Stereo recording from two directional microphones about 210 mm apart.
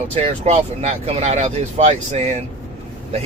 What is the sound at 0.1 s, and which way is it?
Speech, 30° right (ahead or behind).